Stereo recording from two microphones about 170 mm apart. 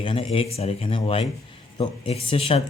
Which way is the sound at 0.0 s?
35° left (ahead or behind).